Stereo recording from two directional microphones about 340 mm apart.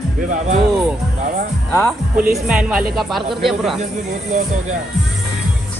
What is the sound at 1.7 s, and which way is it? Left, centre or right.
Music, centre.